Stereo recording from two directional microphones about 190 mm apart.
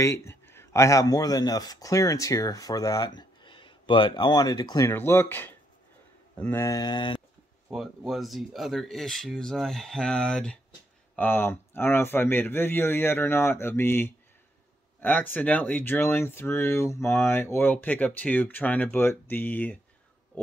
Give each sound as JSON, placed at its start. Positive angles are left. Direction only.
{"t": 0.0, "sound": "speech", "side_deg": 15}
{"t": 7.7, "sound": "speech", "side_deg": 0}